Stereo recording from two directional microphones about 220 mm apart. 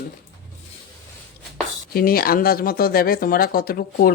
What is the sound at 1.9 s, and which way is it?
Speech, 40° left (ahead or behind).